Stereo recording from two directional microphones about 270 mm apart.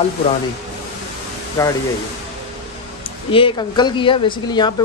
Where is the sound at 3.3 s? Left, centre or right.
Centre.